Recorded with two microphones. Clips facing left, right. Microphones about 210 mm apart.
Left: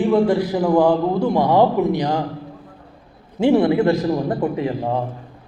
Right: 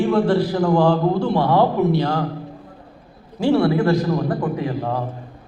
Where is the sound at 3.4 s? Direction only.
20° left (ahead or behind).